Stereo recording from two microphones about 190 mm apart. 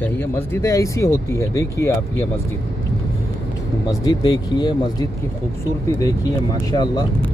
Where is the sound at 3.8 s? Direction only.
20° left (ahead or behind).